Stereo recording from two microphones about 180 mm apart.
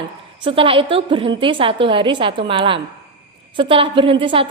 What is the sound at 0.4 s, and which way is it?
A woman's voice, 30° right (ahead or behind).